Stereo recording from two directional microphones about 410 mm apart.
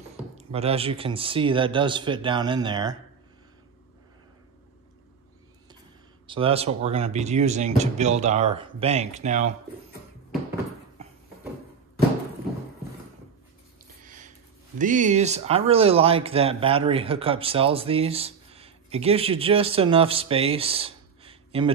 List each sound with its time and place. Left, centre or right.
0.5 s speech: centre
6.2 s speech: centre
14.0 s sniff: centre
14.8 s speech: centre